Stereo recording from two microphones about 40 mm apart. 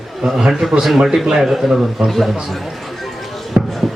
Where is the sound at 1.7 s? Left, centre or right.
Centre.